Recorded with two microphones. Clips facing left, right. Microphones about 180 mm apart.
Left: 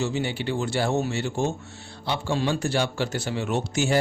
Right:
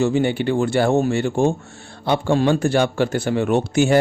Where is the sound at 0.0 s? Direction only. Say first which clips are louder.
Right 9 dB; 55° right (ahead or behind).